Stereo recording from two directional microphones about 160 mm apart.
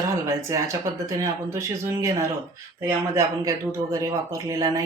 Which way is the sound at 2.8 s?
15° right (ahead or behind).